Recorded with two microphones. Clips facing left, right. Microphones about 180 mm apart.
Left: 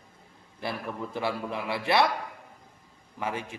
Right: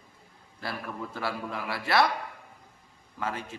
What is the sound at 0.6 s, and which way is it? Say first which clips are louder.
A man's voice: left 2 dB; 20° left (ahead or behind).